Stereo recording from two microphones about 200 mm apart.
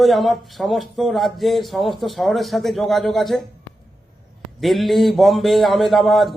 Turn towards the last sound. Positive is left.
turn(degrees=0)  # may be behind; listen again after turning